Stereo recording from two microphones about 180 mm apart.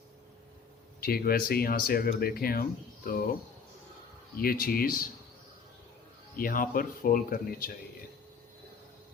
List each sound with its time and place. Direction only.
1.0 s speech: 55° left (ahead or behind)
4.4 s speech: 55° left (ahead or behind)
6.3 s speech: 50° left (ahead or behind)